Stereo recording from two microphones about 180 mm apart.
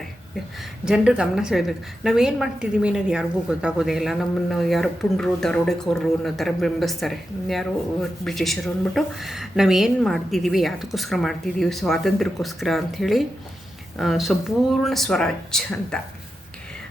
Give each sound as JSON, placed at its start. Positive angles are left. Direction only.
{"t": 0.9, "sound": "a woman's voice", "side_deg": -5}